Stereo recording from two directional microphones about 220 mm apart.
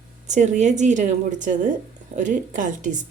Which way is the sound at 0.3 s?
35° right (ahead or behind).